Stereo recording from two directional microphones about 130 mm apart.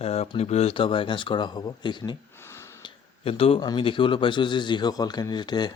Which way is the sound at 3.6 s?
35° left (ahead or behind).